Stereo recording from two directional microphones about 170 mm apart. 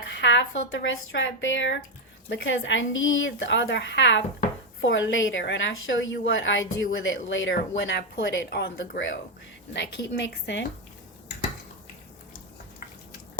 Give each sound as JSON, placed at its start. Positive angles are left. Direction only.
{"t": 0.2, "sound": "a woman's voice", "side_deg": 90}